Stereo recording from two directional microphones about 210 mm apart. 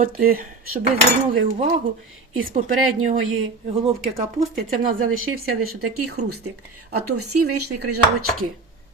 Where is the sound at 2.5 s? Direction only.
40° right (ahead or behind).